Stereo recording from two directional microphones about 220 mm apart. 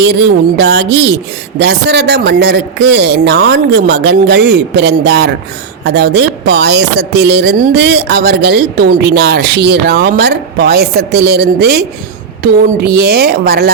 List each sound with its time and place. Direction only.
0.0 s speech: 50° right (ahead or behind)